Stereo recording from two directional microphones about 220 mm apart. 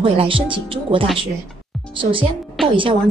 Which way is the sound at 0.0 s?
25° right (ahead or behind).